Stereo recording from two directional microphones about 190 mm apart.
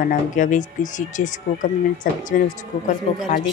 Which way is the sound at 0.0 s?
40° left (ahead or behind).